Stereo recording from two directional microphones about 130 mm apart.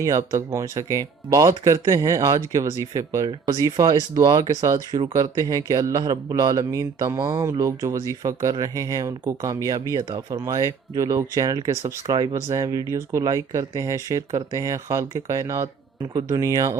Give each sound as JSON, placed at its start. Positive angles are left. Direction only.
{"t": 0.0, "sound": "speech", "side_deg": -25}